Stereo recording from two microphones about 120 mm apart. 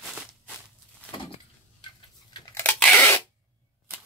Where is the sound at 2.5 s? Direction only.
15° left (ahead or behind).